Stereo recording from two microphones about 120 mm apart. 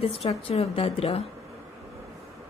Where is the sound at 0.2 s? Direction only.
60° left (ahead or behind).